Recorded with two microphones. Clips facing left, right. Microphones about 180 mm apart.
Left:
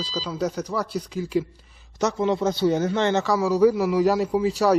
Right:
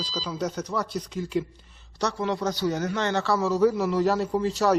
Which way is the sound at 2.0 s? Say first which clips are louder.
Left 5 dB; 20° left (ahead or behind).